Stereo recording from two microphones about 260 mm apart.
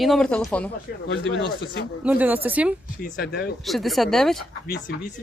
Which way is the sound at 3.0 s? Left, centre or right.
Left.